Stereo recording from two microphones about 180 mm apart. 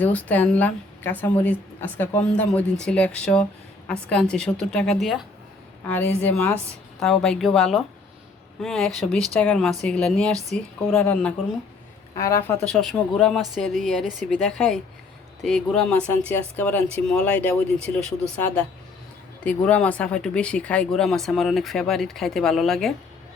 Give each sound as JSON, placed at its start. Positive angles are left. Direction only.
{"t": 0.0, "sound": "a woman's voice", "side_deg": 10}
{"t": 12.6, "sound": "a woman's voice", "side_deg": 0}